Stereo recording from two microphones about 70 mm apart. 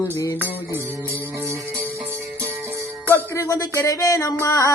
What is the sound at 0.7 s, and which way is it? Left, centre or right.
Music, right.